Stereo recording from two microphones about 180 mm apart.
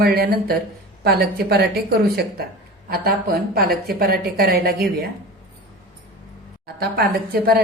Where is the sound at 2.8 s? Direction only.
60° right (ahead or behind).